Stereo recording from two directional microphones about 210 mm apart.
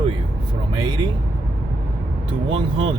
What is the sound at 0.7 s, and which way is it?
Vehicle, 25° right (ahead or behind).